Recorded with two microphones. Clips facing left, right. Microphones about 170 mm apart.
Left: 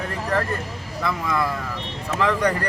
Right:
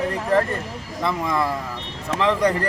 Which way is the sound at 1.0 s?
25° right (ahead or behind).